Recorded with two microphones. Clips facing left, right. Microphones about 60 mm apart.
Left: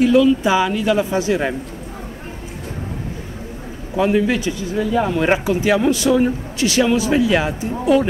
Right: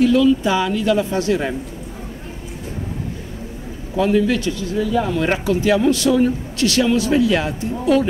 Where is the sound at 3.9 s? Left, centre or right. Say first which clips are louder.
Even; centre.